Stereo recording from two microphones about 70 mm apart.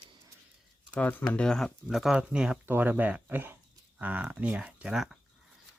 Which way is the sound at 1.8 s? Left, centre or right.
Centre.